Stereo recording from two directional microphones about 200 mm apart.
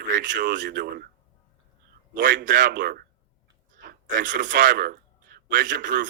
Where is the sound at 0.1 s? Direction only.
40° right (ahead or behind).